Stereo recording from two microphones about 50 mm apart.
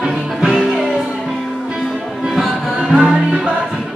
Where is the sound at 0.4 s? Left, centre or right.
Centre.